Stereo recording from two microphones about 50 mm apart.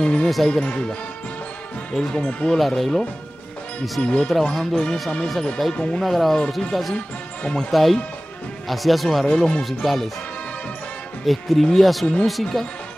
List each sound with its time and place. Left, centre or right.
0.0 s speech: centre
2.0 s speech: centre
2.6 s speech: centre
4.0 s speech: centre
4.3 s speech: centre
5.8 s speech: left
6.0 s speech: centre
11.2 s speech: centre